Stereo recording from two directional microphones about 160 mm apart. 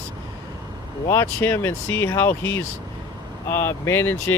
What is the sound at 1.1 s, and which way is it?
Speech, 15° left (ahead or behind).